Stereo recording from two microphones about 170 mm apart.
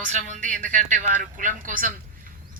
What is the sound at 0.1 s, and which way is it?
A man's voice, 45° right (ahead or behind).